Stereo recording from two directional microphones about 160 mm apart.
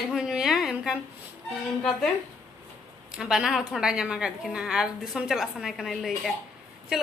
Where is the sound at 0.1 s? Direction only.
5° right (ahead or behind).